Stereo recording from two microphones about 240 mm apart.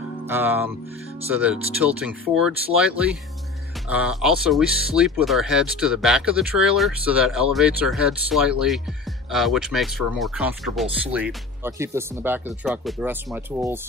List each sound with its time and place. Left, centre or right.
0.3 s speech: centre